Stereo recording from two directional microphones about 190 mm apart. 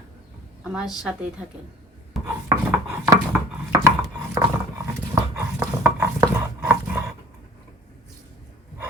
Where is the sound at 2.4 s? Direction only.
15° right (ahead or behind).